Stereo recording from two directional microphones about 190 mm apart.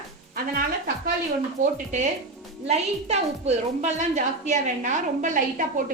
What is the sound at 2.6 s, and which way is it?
A woman's voice, 35° right (ahead or behind).